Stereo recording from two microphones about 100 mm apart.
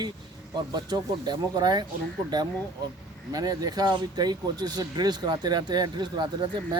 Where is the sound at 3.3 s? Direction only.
40° right (ahead or behind).